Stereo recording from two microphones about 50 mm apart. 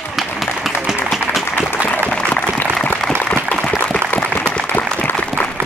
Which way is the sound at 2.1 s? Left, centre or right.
Left.